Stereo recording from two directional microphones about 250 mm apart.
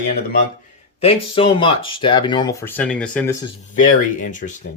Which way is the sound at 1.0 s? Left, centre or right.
Left.